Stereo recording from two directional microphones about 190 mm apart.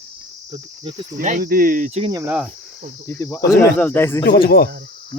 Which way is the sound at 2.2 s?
5° right (ahead or behind).